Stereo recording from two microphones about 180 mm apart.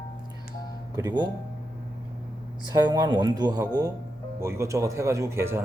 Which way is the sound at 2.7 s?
25° right (ahead or behind).